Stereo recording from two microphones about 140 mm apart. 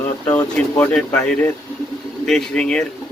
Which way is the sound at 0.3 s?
10° left (ahead or behind).